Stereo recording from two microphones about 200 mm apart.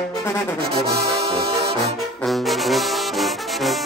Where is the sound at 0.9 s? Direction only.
50° right (ahead or behind).